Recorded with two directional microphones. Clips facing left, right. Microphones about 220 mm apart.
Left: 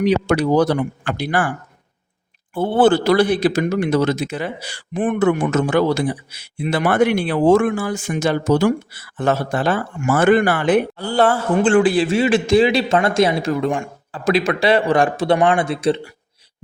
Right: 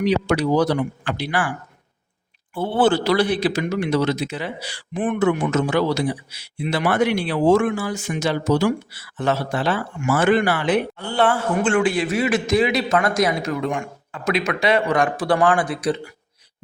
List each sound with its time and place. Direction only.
0.0 s a man's voice: 50° left (ahead or behind)
2.6 s a man's voice: 50° left (ahead or behind)
10.9 s a man's voice: 40° left (ahead or behind)